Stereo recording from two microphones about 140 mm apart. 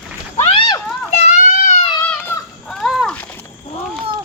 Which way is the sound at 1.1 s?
55° left (ahead or behind).